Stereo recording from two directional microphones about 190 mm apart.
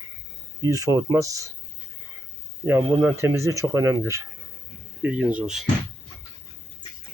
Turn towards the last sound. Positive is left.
turn(degrees=-5)  # may be behind; listen again after turning